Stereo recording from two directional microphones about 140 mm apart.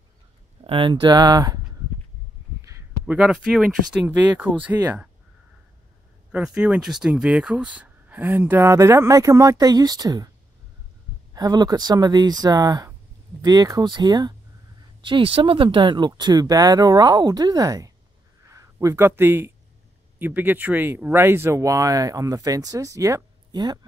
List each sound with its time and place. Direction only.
0.7 s speech: 35° right (ahead or behind)
3.1 s speech: 5° right (ahead or behind)
6.3 s speech: 5° right (ahead or behind); by 10.3 s 25° right (ahead or behind)
11.3 s speech: 30° right (ahead or behind)